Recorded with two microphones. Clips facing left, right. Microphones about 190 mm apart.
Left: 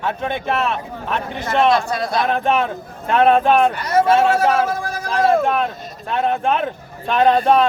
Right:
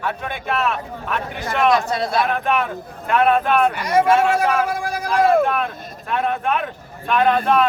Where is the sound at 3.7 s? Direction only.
10° right (ahead or behind).